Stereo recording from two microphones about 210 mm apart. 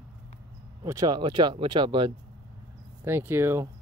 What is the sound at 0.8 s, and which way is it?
Speech, 20° right (ahead or behind).